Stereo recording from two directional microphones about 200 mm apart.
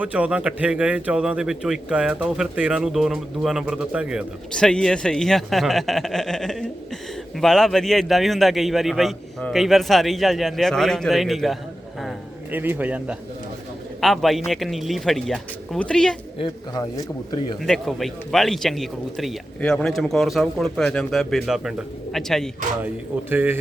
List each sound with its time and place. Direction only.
0.0 s a man's voice: 5° right (ahead or behind)
11.9 s a sound: 5° right (ahead or behind)
14.0 s a man's voice: centre (ahead or behind)
16.4 s speech: 20° left (ahead or behind)
17.6 s a man's voice: centre (ahead or behind)
23.3 s speech: 10° right (ahead or behind)